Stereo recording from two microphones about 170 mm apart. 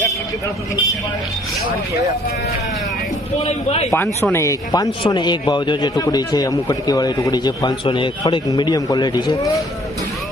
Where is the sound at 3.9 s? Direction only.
15° left (ahead or behind).